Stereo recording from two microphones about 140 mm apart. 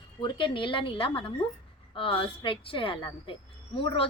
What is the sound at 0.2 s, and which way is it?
A woman's voice, 35° left (ahead or behind).